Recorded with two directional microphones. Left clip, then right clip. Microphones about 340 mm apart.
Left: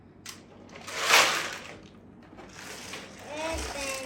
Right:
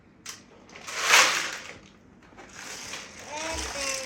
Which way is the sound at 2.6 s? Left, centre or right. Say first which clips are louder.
Right 3 dB; centre.